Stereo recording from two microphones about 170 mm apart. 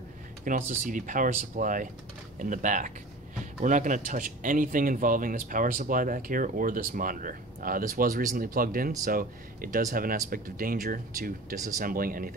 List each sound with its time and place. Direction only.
0.5 s speech: 50° right (ahead or behind)